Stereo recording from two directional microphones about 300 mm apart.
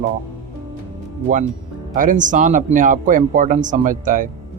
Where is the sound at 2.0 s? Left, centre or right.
Right.